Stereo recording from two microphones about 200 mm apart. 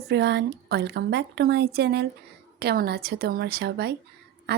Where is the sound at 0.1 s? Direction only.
60° right (ahead or behind).